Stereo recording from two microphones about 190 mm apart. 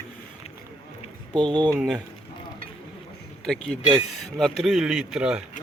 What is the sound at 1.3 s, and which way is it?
Speech, 25° right (ahead or behind).